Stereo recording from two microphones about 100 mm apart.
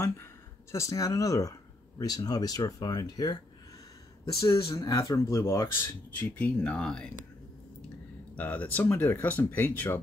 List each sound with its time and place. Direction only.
0.0 s speech: 30° left (ahead or behind)
4.4 s speech: 30° left (ahead or behind)
6.1 s speech: 15° left (ahead or behind)
8.4 s speech: 15° left (ahead or behind)